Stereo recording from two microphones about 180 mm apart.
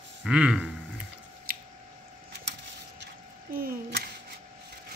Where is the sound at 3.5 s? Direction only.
55° right (ahead or behind).